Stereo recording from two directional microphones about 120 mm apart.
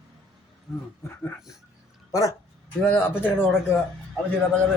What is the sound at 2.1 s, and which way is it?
Speech, 30° left (ahead or behind).